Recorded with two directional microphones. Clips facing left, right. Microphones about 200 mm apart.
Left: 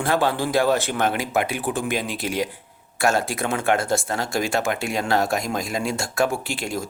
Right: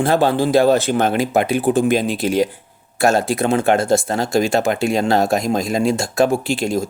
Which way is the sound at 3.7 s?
20° right (ahead or behind).